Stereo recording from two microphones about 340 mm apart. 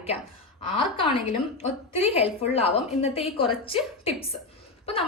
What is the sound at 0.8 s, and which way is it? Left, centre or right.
A woman's voice, centre.